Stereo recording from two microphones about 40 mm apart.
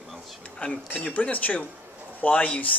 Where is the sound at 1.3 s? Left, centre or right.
Left.